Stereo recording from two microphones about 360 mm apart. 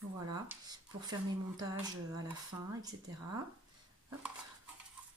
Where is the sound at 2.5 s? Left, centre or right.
Centre.